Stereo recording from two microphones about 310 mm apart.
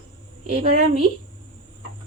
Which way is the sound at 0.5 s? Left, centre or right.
Right.